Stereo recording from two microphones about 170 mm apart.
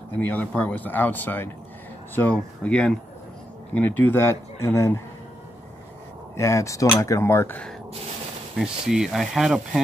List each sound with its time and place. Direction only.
0.2 s speech: 10° left (ahead or behind)
6.3 s speech: 15° left (ahead or behind)
8.5 s speech: centre (ahead or behind)